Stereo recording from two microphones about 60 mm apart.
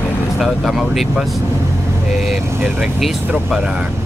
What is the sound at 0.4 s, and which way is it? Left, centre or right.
Speech, centre.